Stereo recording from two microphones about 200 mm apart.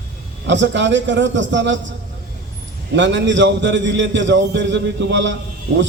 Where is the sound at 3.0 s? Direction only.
65° right (ahead or behind).